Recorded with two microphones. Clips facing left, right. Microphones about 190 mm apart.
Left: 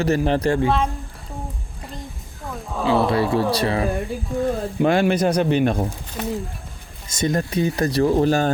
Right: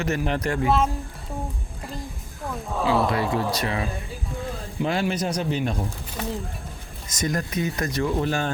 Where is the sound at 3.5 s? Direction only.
30° left (ahead or behind).